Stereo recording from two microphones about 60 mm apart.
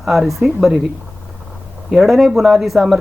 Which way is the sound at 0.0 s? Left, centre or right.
Centre.